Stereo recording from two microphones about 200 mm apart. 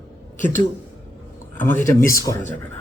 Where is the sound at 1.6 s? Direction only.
10° left (ahead or behind).